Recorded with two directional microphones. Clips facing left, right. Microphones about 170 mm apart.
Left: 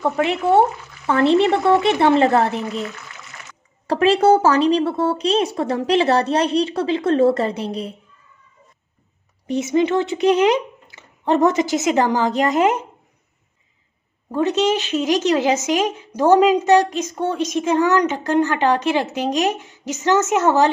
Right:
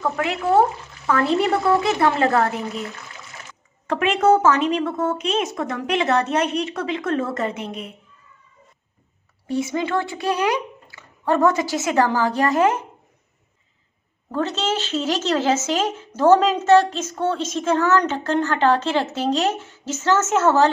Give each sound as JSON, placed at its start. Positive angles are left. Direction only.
{"t": 0.0, "sound": "speech", "side_deg": 25}
{"t": 3.8, "sound": "a woman's voice", "side_deg": 35}
{"t": 9.5, "sound": "speech", "side_deg": 20}
{"t": 14.3, "sound": "a woman's voice", "side_deg": 15}